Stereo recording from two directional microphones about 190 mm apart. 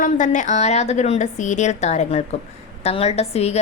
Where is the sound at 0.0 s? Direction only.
40° left (ahead or behind).